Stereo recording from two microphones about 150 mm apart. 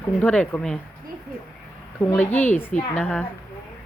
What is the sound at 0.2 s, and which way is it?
Speech, 10° left (ahead or behind).